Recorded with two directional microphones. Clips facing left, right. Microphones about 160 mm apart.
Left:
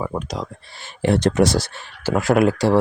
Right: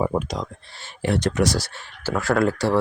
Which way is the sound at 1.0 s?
25° left (ahead or behind).